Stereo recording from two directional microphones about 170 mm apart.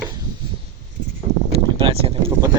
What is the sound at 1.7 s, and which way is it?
Boat, 30° right (ahead or behind).